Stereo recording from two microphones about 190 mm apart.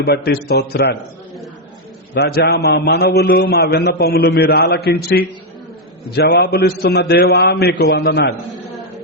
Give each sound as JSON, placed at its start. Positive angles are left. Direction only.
{"t": 0.0, "sound": "a man's voice", "side_deg": 55}
{"t": 2.1, "sound": "a man's voice", "side_deg": 55}